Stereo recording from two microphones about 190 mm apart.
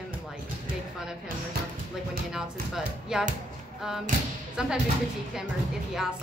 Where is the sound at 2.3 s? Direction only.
5° right (ahead or behind).